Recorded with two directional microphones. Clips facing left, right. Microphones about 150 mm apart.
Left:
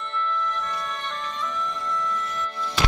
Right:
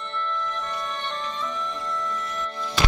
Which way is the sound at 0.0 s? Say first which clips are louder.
Left 2 dB; 35° right (ahead or behind).